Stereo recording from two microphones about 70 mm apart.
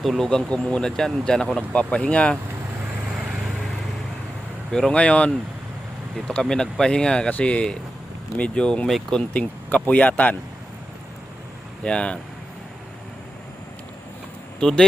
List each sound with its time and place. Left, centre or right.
0.0 s speech: centre
4.7 s speech: centre
9.3 s speech: centre
11.8 s speech: centre
14.6 s speech: centre